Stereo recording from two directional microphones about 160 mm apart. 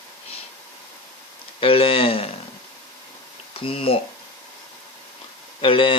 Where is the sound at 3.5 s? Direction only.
35° left (ahead or behind).